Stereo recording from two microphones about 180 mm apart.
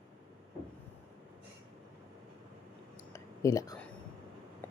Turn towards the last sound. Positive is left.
turn(degrees=20)  # may be behind; listen again after turning